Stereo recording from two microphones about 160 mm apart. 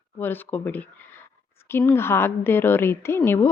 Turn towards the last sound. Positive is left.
turn(degrees=15)  # may be behind; listen again after turning